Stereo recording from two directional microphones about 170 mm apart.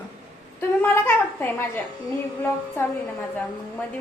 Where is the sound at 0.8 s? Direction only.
10° left (ahead or behind).